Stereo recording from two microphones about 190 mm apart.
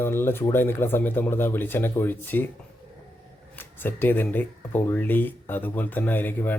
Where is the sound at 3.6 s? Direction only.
10° left (ahead or behind).